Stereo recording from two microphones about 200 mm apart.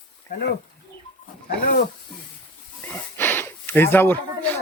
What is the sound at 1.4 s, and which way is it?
Speech, 45° left (ahead or behind).